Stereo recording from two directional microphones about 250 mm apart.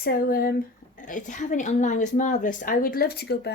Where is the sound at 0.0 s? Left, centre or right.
Left.